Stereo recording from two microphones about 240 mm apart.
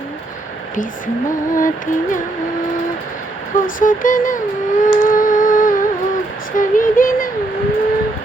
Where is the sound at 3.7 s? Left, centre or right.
Left.